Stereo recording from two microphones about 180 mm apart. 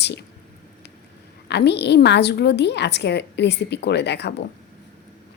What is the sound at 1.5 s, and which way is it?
A woman's voice, 70° left (ahead or behind).